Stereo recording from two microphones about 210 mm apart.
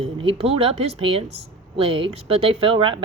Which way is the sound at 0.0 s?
25° right (ahead or behind).